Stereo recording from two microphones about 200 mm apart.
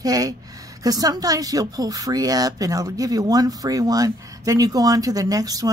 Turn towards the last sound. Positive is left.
turn(degrees=-20)  # may be behind; listen again after turning